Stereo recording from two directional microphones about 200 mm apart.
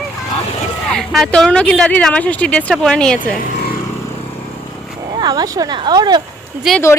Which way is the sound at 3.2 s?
45° left (ahead or behind).